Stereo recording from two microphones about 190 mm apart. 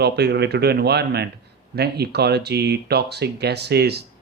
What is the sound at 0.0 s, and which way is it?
Speech, 60° right (ahead or behind).